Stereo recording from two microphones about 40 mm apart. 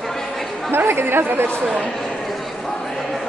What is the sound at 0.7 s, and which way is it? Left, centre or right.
Chatter, right.